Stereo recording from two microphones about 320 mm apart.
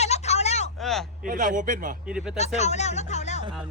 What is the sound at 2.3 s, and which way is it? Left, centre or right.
Speech, left.